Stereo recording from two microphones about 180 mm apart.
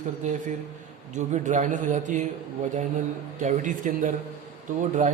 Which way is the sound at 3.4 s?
45° right (ahead or behind).